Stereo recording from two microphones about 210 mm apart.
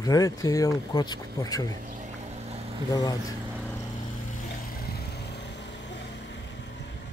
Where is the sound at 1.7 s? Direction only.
40° right (ahead or behind).